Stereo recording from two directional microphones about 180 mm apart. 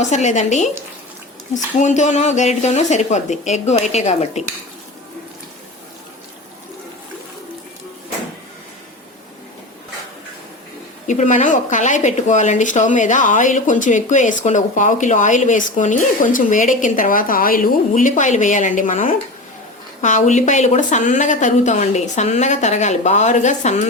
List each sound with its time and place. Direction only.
0.0 s speech: 40° left (ahead or behind)
11.0 s speech: 45° left (ahead or behind)